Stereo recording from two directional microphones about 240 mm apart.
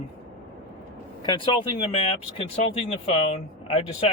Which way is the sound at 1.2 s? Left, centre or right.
Centre.